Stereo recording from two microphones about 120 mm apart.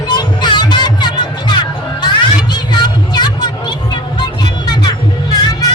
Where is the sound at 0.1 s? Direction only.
40° left (ahead or behind).